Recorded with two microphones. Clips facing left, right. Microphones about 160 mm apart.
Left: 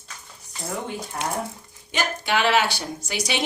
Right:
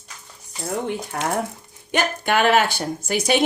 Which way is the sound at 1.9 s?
50° right (ahead or behind).